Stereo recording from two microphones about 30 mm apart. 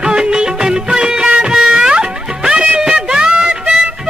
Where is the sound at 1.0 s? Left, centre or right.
Right.